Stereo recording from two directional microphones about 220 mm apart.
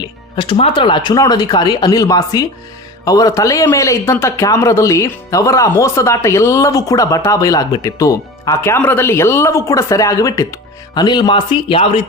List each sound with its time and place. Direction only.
0.0 s a man's voice: 20° left (ahead or behind)